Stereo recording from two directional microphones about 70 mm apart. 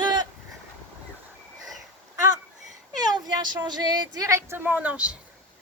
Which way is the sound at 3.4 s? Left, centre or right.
Right.